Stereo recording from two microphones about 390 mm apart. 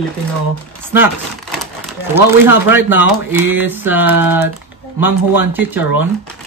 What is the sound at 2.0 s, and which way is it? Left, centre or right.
Speech, centre.